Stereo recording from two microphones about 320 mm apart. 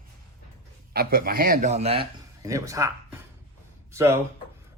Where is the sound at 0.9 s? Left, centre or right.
Right; by 2.9 s centre.